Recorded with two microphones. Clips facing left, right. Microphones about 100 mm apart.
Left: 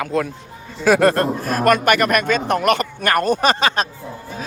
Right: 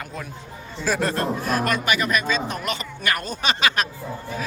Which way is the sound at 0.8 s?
70° left (ahead or behind).